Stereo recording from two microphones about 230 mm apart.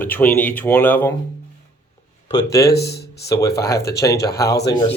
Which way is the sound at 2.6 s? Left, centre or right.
Left.